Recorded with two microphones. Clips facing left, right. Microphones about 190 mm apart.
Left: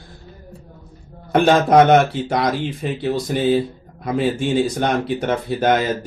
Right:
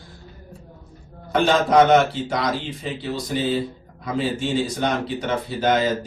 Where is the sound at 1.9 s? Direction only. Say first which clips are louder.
Left 2 dB; 55° left (ahead or behind).